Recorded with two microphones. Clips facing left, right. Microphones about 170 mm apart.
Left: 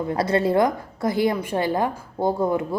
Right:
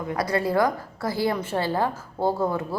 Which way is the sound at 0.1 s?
25° left (ahead or behind).